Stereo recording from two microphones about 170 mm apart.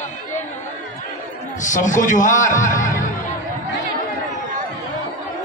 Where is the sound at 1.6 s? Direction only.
45° left (ahead or behind).